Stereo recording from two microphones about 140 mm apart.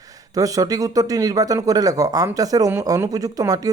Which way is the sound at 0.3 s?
25° right (ahead or behind).